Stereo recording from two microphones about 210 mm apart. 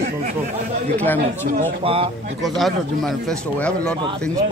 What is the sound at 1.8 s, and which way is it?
Speech, 25° right (ahead or behind).